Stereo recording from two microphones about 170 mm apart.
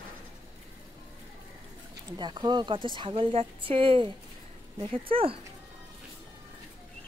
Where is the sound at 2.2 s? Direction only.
25° right (ahead or behind).